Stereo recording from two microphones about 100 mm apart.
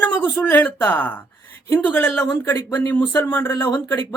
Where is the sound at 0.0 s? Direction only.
15° left (ahead or behind).